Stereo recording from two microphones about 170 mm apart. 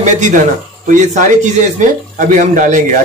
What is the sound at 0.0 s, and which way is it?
A man's voice, 45° right (ahead or behind).